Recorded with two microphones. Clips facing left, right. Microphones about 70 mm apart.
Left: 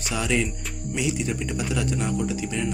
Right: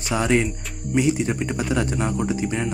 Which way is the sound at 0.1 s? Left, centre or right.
Right.